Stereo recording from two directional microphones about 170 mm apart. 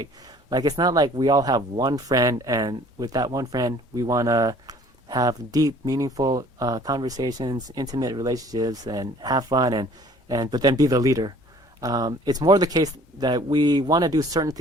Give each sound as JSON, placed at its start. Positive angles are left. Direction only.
{"t": 0.5, "sound": "speech", "side_deg": -25}